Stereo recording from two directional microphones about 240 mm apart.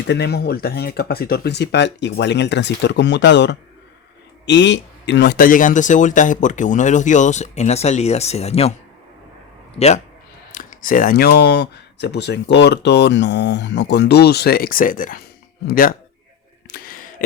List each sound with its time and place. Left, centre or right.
0.1 s speech: left
9.7 s a man's voice: left
16.7 s a sound: left